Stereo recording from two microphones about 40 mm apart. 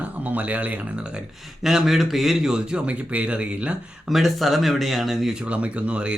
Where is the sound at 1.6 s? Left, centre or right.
Centre.